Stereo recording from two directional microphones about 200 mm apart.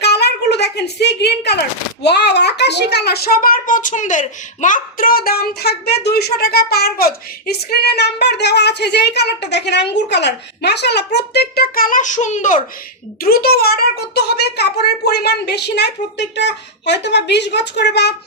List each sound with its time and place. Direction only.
0.0 s a sound: 55° left (ahead or behind)
2.0 s a child's voice: 55° left (ahead or behind); by 12.6 s 40° left (ahead or behind)
13.2 s a child's voice: 50° left (ahead or behind)